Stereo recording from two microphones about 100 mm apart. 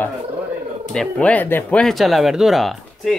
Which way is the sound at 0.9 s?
10° left (ahead or behind).